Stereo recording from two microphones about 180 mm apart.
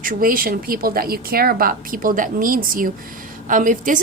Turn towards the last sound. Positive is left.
turn(degrees=-45)  # may be behind; listen again after turning